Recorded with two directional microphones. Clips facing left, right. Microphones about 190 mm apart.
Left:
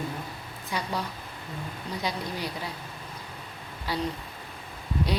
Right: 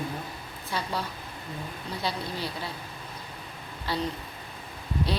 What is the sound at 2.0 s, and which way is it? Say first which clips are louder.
Speech: even; 15° left (ahead or behind).